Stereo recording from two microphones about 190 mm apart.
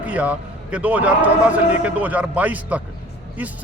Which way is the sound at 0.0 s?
5° right (ahead or behind).